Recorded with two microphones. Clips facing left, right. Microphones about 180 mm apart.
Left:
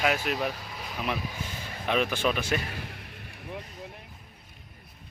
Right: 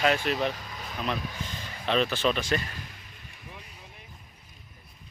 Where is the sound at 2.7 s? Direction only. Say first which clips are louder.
Left 5 dB; 60° left (ahead or behind).